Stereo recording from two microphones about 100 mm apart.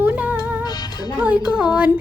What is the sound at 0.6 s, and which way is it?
Music, 45° left (ahead or behind).